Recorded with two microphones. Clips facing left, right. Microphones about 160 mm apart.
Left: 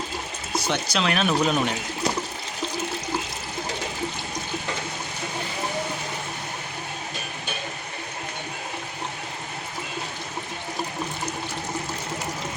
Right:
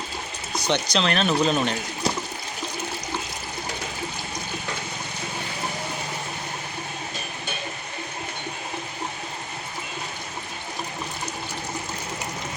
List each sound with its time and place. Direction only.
0.5 s speech: 5° left (ahead or behind)